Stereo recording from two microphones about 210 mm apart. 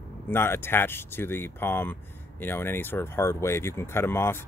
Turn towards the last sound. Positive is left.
turn(degrees=10)  # may be behind; listen again after turning